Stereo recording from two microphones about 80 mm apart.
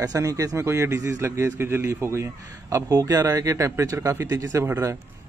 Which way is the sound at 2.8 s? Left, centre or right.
Right.